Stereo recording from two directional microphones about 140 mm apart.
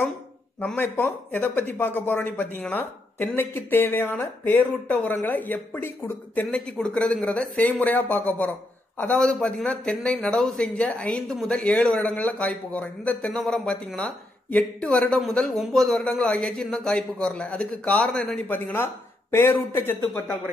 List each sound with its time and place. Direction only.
0.6 s a man's voice: 15° left (ahead or behind)